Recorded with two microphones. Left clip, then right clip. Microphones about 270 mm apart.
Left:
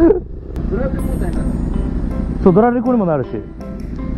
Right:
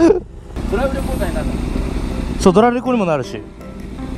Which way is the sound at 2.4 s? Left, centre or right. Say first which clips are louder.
Even; right.